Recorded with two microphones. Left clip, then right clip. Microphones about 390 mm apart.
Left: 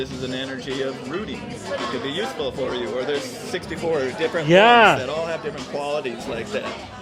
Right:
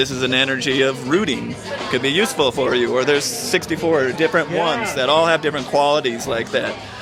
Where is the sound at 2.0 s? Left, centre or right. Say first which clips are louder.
Right 9 dB; right.